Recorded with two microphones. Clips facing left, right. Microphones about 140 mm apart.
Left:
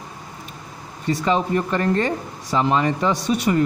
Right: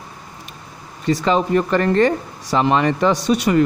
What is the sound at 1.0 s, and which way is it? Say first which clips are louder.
Speech: right 3 dB; 85° right.